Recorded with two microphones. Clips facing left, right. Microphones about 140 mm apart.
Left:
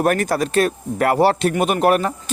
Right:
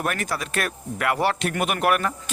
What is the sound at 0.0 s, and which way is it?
Speech, 40° left (ahead or behind).